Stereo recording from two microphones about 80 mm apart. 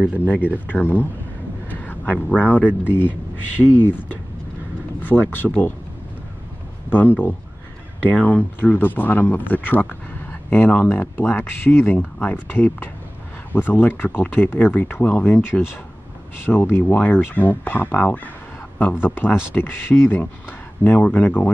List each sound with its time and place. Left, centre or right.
0.0 s speech: centre
0.7 s a man's voice: left
5.0 s speech: left
6.9 s speech: left